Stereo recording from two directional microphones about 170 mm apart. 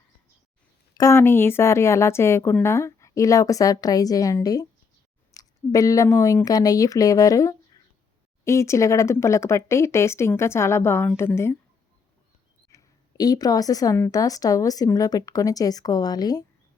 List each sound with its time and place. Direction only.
0.9 s a woman's voice: 15° left (ahead or behind)
12.7 s a woman's voice: 20° left (ahead or behind)